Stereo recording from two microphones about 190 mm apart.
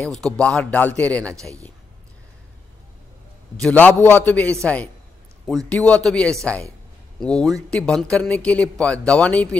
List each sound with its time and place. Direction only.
0.0 s speech: 5° left (ahead or behind)
1.3 s a man's voice: 15° right (ahead or behind)
3.6 s speech: 10° left (ahead or behind)
5.7 s speech: 5° left (ahead or behind)